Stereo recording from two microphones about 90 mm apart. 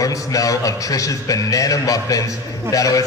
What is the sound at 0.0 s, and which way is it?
A man's voice, 40° left (ahead or behind).